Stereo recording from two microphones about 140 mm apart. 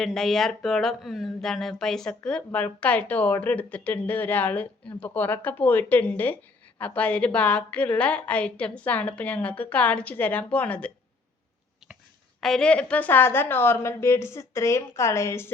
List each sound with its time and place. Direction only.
0.0 s speech: centre (ahead or behind)
12.4 s speech: 5° left (ahead or behind); by 15.4 s 20° left (ahead or behind)